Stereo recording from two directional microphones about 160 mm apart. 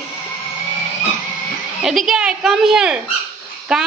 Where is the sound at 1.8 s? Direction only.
Centre (ahead or behind).